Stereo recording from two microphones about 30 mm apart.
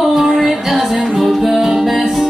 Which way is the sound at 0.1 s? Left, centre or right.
Centre.